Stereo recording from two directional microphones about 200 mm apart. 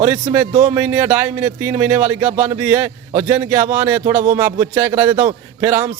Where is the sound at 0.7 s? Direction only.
10° right (ahead or behind).